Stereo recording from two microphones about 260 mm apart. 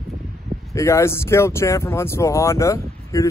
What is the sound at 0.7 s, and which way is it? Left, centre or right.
Speech, centre.